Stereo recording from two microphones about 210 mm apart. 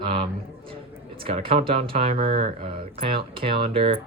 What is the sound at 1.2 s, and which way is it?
Speech, 25° right (ahead or behind).